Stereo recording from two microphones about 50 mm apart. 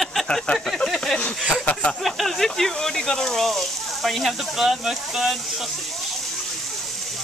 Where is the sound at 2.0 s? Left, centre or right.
Centre.